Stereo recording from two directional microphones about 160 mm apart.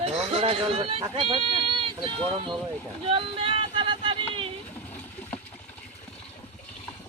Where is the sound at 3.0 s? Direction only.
35° right (ahead or behind).